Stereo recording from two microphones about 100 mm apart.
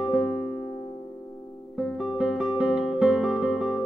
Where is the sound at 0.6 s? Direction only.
60° left (ahead or behind).